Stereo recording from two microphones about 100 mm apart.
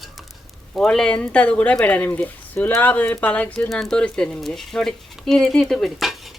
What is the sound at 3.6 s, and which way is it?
Speech, centre (ahead or behind).